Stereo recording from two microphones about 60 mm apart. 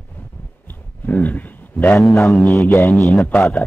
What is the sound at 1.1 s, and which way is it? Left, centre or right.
A man's voice, left.